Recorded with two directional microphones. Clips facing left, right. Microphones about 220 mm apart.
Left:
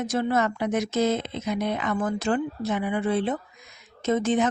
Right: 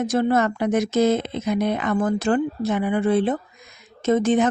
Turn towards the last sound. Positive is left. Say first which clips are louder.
# right 4 dB
turn(degrees=-50)  # may be behind; listen again after turning